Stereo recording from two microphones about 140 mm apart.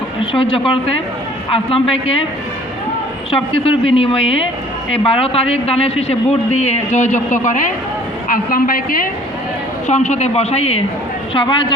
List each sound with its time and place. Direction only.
0.2 s a man's voice: 40° left (ahead or behind)
3.3 s a man's voice: 40° left (ahead or behind); by 7.7 s 70° left (ahead or behind)
8.3 s a woman's voice: 90° left
9.8 s a man's voice: 55° left (ahead or behind)
11.3 s a man's voice: 35° left (ahead or behind)